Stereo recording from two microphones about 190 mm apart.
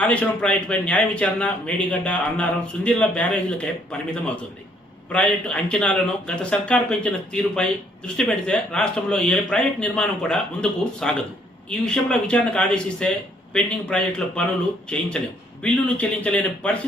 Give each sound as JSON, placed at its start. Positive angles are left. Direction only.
{"t": 0.0, "sound": "a man's voice", "side_deg": 5}
{"t": 5.1, "sound": "a man's voice", "side_deg": 5}